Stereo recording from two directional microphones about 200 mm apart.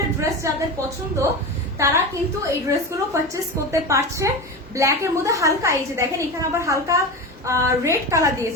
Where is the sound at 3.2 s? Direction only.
15° right (ahead or behind).